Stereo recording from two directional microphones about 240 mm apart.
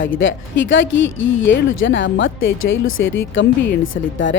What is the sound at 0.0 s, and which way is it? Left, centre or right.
Speech, left.